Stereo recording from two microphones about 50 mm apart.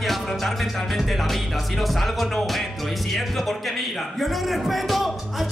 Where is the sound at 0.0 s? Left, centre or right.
Centre.